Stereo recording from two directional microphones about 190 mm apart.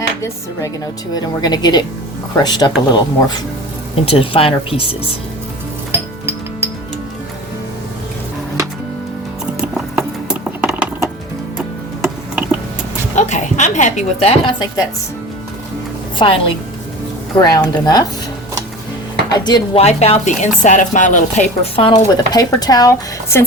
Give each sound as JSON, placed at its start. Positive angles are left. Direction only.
{"t": 1.1, "sound": "speech", "side_deg": 20}
{"t": 10.6, "sound": "typing", "side_deg": -10}
{"t": 12.0, "sound": "a sound", "side_deg": -5}
{"t": 13.1, "sound": "a woman's voice", "side_deg": 40}
{"t": 16.1, "sound": "a woman's voice", "side_deg": 25}
{"t": 19.5, "sound": "speech", "side_deg": 20}
{"t": 19.8, "sound": "speech", "side_deg": 35}